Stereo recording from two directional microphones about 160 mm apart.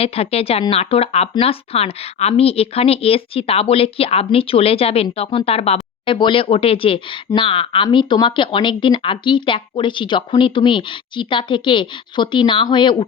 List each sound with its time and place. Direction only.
0.0 s speech: 40° left (ahead or behind)